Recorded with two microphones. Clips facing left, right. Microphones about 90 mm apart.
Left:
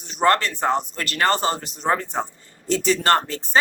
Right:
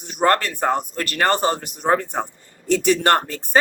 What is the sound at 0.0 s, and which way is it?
Speech, 50° right (ahead or behind).